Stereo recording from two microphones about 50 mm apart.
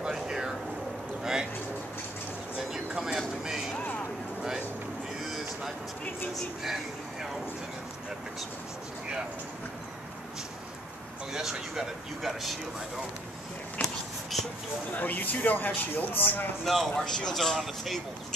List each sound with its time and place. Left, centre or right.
0.0 s a sound: centre
2.5 s vehicle: centre
11.3 s speech: centre
14.3 s speech: centre
15.0 s speech: left
16.6 s speech: centre
16.9 s speech: centre